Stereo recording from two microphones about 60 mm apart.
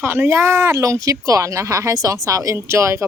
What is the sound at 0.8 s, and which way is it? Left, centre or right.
Speech, right.